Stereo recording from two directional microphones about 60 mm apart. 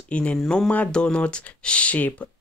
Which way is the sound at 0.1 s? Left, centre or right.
Centre.